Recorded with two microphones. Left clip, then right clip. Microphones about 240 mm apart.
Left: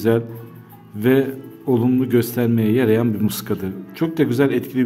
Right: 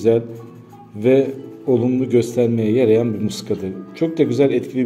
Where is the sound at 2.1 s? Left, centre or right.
Left.